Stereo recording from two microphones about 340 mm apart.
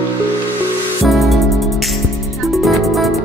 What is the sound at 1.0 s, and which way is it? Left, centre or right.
Music, centre.